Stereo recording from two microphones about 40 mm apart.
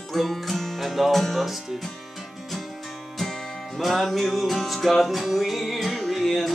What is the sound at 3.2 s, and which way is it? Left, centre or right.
Music, centre.